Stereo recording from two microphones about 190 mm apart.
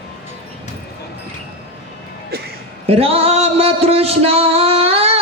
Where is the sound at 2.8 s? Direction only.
30° right (ahead or behind).